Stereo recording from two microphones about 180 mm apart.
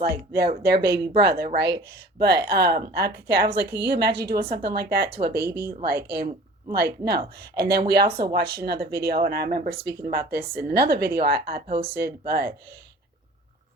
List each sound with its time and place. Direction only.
0.0 s speech: 55° right (ahead or behind)